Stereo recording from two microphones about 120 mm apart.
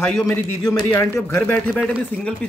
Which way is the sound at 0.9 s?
20° left (ahead or behind).